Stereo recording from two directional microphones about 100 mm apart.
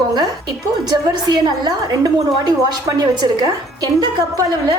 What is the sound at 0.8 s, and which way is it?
A woman's voice, 40° right (ahead or behind).